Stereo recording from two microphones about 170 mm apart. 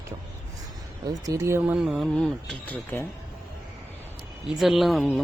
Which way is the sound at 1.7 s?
Centre (ahead or behind).